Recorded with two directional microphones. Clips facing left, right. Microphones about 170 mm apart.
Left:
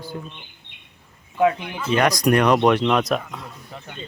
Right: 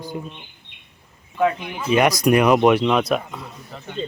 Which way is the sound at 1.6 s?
10° right (ahead or behind).